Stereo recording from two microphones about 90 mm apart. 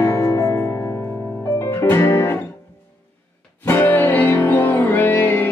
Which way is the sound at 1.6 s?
30° left (ahead or behind).